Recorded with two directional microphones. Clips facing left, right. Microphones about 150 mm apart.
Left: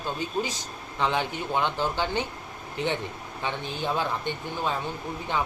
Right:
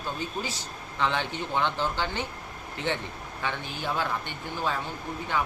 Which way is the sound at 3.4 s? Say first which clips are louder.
Left 2 dB; 20° left (ahead or behind).